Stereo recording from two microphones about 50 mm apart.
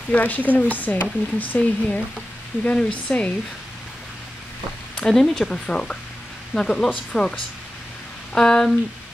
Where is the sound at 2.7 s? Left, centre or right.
Centre.